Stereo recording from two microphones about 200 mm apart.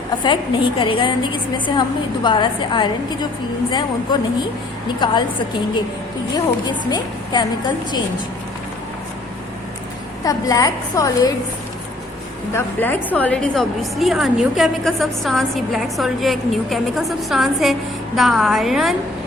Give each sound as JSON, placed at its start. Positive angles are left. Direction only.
{"t": 0.8, "sound": "speech", "side_deg": 25}
{"t": 6.3, "sound": "speech", "side_deg": 20}
{"t": 10.2, "sound": "a woman's voice", "side_deg": 15}
{"t": 12.5, "sound": "a woman's voice", "side_deg": 10}